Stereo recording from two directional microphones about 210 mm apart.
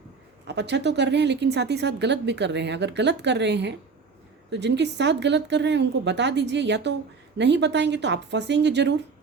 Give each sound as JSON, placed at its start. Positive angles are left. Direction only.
{"t": 0.4, "sound": "speech", "side_deg": -55}